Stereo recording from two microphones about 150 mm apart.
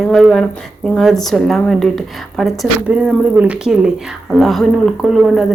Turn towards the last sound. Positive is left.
turn(degrees=0)  # may be behind; listen again after turning